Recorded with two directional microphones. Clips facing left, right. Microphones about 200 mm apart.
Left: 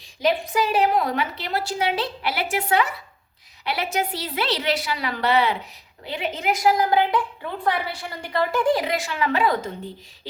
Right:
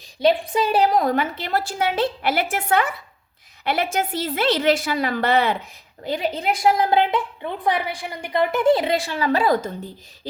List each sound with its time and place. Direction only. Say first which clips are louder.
0.2 s a woman's voice: right 3 dB; 30° right (ahead or behind)